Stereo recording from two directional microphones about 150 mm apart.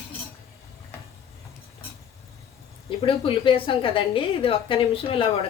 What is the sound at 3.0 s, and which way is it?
A woman's voice, 35° left (ahead or behind).